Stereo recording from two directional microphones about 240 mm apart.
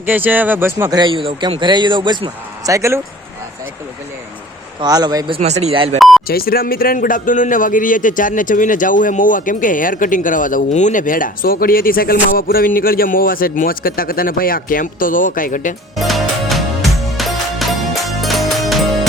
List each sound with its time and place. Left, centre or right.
0.0 s speech: centre
4.8 s speech: centre
6.0 s beep: centre
6.2 s speech: left
16.0 s music: centre